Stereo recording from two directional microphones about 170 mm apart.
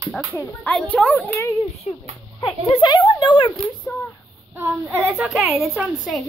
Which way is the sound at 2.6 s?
30° left (ahead or behind).